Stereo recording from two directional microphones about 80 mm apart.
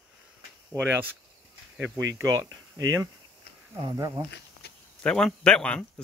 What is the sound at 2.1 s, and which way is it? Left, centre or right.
Speech, right.